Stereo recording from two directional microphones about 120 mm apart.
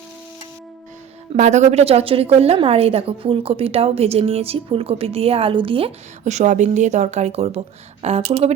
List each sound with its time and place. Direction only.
1.3 s a woman's voice: 75° right (ahead or behind); by 5.9 s 50° right (ahead or behind)
6.2 s a woman's voice: 75° right (ahead or behind)